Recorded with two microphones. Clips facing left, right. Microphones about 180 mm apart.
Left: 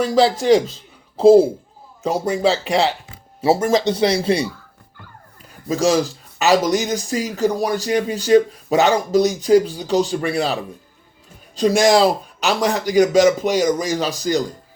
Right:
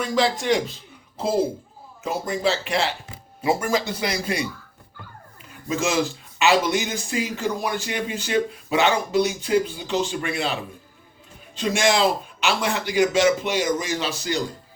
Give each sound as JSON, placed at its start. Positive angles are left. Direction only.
{"t": 0.0, "sound": "speech", "side_deg": 35}